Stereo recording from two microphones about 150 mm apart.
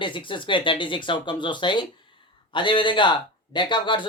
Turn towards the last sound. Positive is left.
turn(degrees=30)  # may be behind; listen again after turning